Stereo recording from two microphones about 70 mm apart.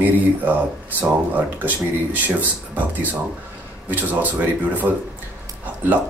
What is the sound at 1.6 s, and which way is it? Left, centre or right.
Speech, right.